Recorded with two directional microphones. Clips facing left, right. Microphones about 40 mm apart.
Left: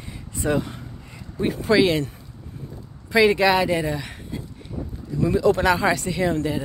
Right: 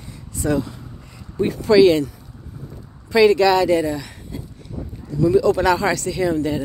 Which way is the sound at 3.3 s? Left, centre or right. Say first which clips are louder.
Right 4 dB; centre.